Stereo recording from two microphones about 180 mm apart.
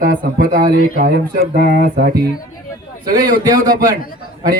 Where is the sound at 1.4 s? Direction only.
65° right (ahead or behind).